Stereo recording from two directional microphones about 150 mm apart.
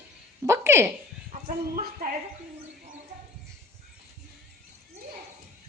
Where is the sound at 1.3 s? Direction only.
65° right (ahead or behind).